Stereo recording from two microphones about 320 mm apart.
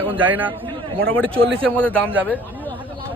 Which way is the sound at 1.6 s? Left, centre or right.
Centre.